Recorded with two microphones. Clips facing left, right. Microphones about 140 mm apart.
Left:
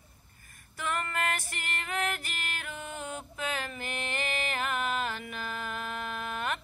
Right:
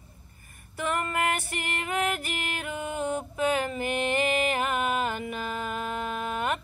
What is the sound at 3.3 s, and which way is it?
Music, 15° right (ahead or behind).